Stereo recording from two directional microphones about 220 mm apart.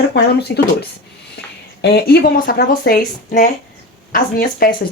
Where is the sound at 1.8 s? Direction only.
45° left (ahead or behind).